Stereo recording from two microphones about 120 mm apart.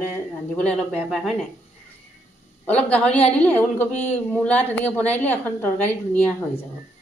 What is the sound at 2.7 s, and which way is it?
A woman's voice, 10° left (ahead or behind).